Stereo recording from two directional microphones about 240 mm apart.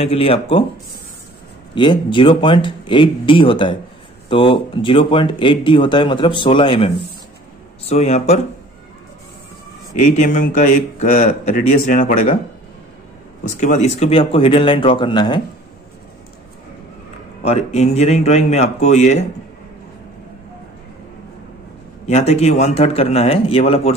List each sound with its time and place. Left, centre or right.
0.0 s speech: left
1.8 s speech: centre
9.9 s a man's voice: left
13.6 s speech: left
17.5 s speech: left
22.0 s speech: left